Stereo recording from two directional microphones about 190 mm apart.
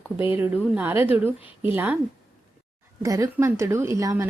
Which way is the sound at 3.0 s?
20° right (ahead or behind).